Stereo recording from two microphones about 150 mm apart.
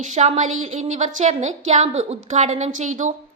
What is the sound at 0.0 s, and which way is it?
A woman's voice, 50° right (ahead or behind).